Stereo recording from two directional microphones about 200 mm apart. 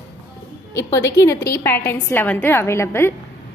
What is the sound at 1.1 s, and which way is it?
A woman's voice, 15° left (ahead or behind).